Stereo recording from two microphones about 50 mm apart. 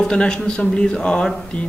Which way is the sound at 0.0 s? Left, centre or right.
Centre.